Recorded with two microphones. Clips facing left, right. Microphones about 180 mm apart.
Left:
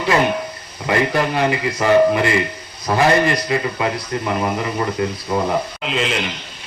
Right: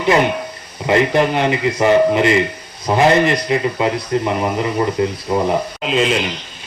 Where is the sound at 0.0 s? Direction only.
20° right (ahead or behind).